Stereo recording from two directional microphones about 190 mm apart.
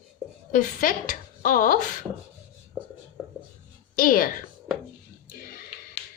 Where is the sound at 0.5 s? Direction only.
45° left (ahead or behind).